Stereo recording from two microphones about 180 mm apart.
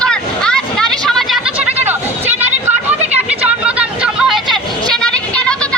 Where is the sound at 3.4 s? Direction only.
5° right (ahead or behind).